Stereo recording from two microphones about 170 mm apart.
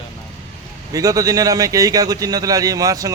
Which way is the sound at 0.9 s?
20° right (ahead or behind).